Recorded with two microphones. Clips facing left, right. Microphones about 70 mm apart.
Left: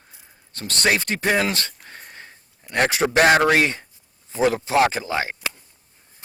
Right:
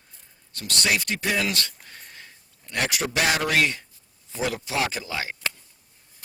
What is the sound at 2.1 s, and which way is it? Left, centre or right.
Sniff, left.